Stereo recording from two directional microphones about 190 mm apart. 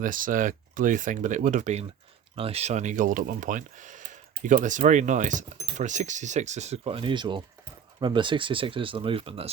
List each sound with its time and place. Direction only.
0.0 s speech: 45° right (ahead or behind); by 9.5 s 30° right (ahead or behind)